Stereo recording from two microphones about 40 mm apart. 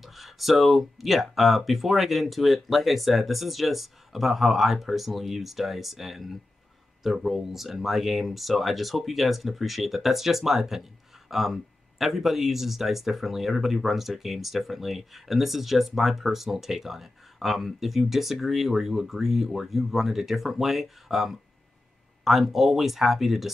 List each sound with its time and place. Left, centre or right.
0.0 s speech: centre